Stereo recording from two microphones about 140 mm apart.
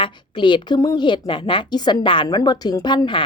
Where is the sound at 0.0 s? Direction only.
35° left (ahead or behind).